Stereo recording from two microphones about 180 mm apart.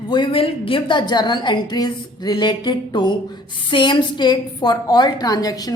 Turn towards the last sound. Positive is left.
turn(degrees=20)  # may be behind; listen again after turning